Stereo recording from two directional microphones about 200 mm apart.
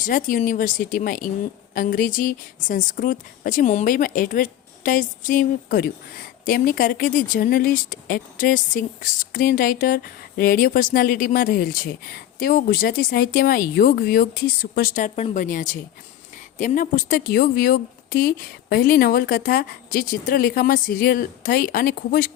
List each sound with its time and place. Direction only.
0.0 s speech: 40° left (ahead or behind)